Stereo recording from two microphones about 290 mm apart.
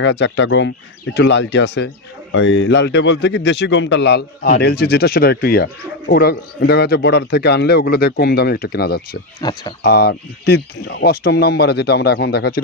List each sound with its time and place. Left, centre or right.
0.0 s speech: left
9.4 s speech: centre
9.8 s speech: left